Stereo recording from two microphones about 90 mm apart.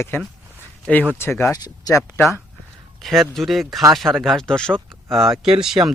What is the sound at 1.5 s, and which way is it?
Speech, 45° left (ahead or behind).